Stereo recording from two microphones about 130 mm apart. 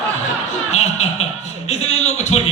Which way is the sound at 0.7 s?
60° left (ahead or behind).